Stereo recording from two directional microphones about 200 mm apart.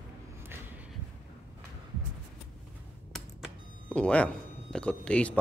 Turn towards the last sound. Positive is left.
turn(degrees=5)  # may be behind; listen again after turning